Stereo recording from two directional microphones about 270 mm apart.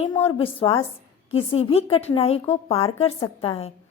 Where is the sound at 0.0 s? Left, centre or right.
Centre.